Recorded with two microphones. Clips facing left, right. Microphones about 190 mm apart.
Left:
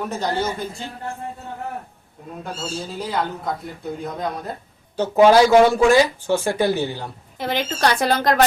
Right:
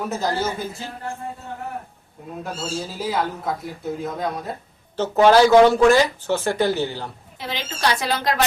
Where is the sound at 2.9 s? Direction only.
5° right (ahead or behind).